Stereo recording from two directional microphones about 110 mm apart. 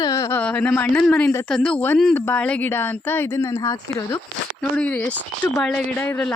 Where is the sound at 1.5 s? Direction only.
5° left (ahead or behind).